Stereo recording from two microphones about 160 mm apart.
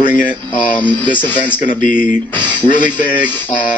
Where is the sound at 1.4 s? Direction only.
55° left (ahead or behind).